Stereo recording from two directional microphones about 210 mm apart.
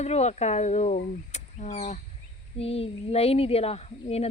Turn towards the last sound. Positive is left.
turn(degrees=30)  # may be behind; listen again after turning